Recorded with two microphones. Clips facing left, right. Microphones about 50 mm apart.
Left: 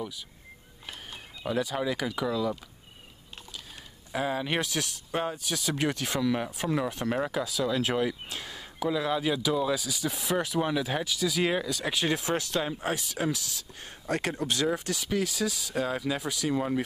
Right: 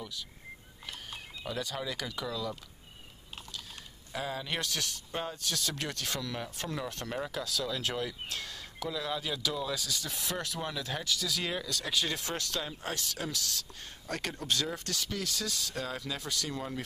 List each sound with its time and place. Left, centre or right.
1.4 s speech: centre
4.1 s speech: left
4.6 s speech: centre
14.0 s speech: left
14.3 s speech: centre